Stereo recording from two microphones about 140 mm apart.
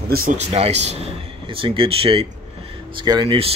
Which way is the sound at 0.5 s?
50° right (ahead or behind).